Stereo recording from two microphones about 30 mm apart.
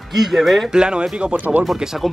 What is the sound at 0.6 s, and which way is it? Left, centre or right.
Speech, right.